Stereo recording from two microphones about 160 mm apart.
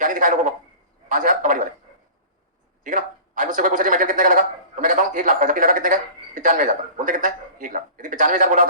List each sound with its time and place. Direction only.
0.0 s a man's voice: 55° right (ahead or behind)
2.8 s a man's voice: 55° right (ahead or behind)